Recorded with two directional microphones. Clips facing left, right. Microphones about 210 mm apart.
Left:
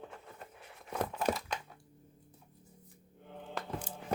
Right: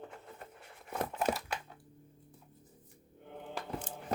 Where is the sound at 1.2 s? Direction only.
5° right (ahead or behind).